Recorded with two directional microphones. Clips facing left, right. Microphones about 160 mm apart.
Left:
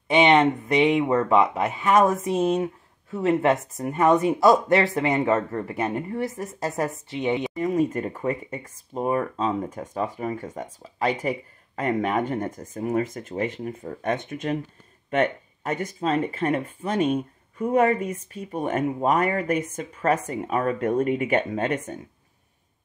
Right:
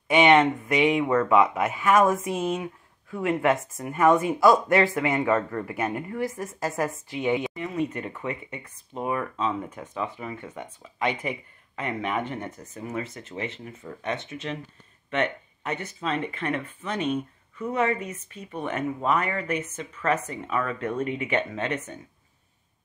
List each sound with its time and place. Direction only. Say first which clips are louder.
0.1 s speech: left 1 dB; 25° left (ahead or behind)
2.0 s speech: left 1 dB; centre (ahead or behind)
2.3 s speech: left 5 dB; 30° left (ahead or behind)
7.5 s speech: left 6 dB; 40° left (ahead or behind)
15.6 s speech: left 5 dB; 40° left (ahead or behind)
18.0 s speech: left 6 dB; 10° left (ahead or behind)
18.3 s speech: left 4 dB; 40° left (ahead or behind)